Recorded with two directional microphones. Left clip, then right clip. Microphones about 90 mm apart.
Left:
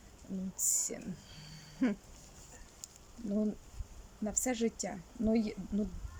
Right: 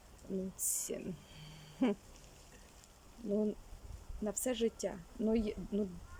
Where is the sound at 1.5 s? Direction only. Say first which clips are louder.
Even; 40° right (ahead or behind).